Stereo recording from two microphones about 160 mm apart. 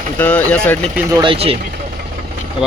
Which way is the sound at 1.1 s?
30° right (ahead or behind).